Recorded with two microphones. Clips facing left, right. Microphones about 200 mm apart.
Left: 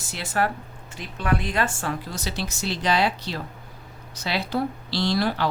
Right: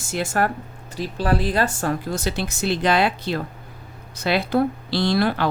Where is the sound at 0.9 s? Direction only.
35° right (ahead or behind).